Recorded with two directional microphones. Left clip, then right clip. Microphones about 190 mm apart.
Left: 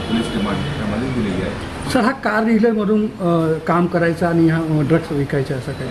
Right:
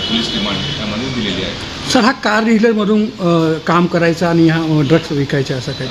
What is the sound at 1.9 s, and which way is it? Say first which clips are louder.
Speech: right 4 dB; 45° right (ahead or behind).